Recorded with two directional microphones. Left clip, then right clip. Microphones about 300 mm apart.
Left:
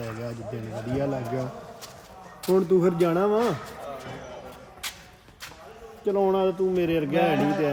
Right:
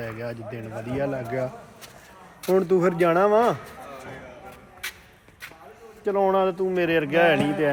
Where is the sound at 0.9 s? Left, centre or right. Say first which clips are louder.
Right 2 dB; centre.